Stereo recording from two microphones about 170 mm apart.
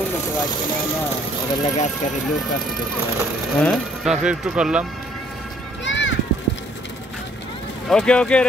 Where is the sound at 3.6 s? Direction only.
5° right (ahead or behind).